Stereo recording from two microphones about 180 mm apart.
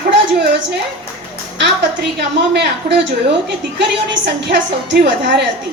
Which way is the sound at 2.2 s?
70° right (ahead or behind).